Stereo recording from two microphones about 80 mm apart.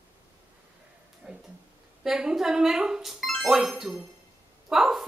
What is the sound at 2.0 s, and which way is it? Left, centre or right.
A woman's voice, centre.